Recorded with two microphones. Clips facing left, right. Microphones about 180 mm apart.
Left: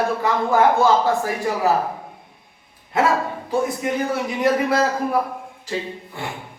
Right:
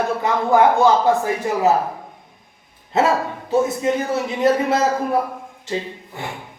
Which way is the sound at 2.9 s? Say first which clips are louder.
Right 1 dB; 25° right (ahead or behind).